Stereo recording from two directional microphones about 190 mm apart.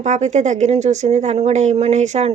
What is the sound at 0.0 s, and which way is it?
Speech, 40° right (ahead or behind).